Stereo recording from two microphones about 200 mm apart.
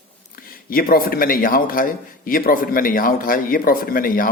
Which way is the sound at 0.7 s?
45° left (ahead or behind).